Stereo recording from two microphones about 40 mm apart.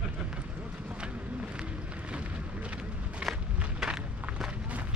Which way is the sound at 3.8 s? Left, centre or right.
Centre.